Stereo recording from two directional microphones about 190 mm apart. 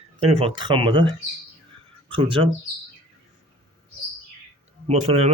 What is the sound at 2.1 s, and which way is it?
Speech, 30° right (ahead or behind).